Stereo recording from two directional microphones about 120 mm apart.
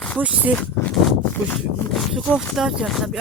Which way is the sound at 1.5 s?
Centre (ahead or behind).